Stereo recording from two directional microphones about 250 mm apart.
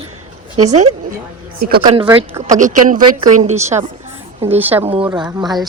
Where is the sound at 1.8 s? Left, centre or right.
Centre.